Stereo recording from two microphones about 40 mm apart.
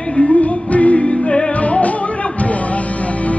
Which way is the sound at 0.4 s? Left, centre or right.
Left.